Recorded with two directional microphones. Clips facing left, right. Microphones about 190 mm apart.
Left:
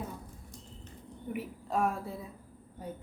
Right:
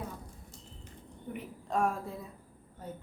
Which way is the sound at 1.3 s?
5° left (ahead or behind).